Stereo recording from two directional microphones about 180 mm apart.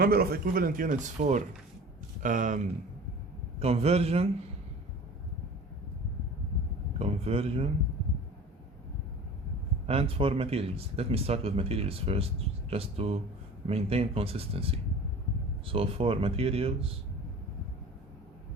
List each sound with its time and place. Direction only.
0.0 s speech: 55° right (ahead or behind)
3.6 s speech: 35° right (ahead or behind)
7.0 s speech: 35° right (ahead or behind)
9.8 s speech: 35° right (ahead or behind)